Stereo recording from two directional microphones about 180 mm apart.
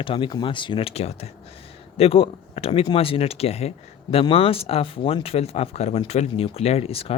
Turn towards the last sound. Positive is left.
turn(degrees=35)  # may be behind; listen again after turning